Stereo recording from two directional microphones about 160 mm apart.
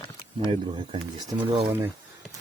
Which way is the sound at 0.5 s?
30° right (ahead or behind).